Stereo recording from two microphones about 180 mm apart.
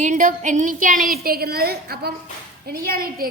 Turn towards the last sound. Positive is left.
turn(degrees=-55)  # may be behind; listen again after turning